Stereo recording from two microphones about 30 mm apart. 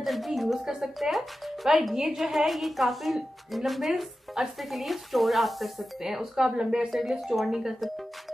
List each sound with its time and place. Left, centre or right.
0.0 s a woman's voice: centre
1.0 s a woman's voice: centre
6.0 s speech: centre
6.9 s speech: centre